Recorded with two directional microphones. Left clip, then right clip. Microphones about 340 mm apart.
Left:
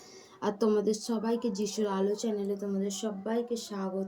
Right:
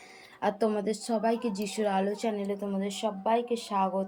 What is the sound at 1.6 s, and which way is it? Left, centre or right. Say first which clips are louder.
Speech: right 2 dB; centre.